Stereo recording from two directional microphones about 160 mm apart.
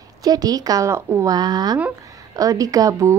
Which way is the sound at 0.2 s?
25° right (ahead or behind).